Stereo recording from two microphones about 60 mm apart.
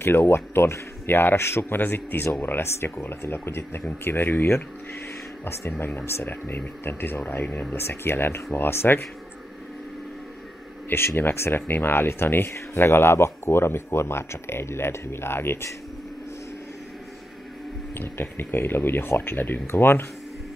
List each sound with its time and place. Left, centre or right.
0.0 s speech: left
5.9 s speech: left
10.9 s speech: left
17.9 s speech: left